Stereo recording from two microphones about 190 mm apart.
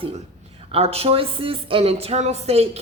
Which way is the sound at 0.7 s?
30° right (ahead or behind).